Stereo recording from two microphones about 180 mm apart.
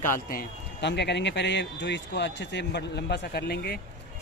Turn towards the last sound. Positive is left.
turn(degrees=60)  # may be behind; listen again after turning